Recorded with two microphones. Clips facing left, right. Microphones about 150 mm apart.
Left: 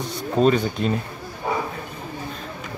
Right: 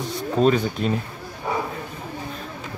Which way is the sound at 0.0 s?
Centre (ahead or behind).